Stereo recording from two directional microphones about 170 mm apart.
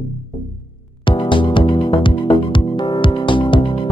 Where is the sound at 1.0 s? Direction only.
30° left (ahead or behind).